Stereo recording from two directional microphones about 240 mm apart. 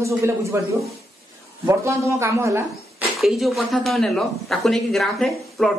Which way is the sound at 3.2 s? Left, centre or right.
Centre.